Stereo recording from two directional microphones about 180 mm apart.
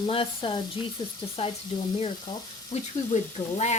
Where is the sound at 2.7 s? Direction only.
35° left (ahead or behind).